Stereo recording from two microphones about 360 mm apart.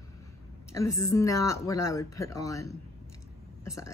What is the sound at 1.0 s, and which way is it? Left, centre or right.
Speech, centre.